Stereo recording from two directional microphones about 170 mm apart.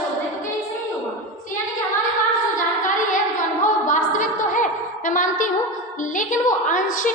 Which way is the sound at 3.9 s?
50° left (ahead or behind).